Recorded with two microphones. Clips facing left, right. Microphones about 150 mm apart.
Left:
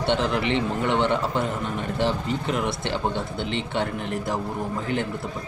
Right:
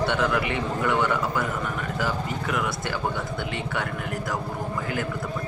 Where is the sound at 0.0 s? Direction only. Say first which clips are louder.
Left 1 dB; 25° left (ahead or behind).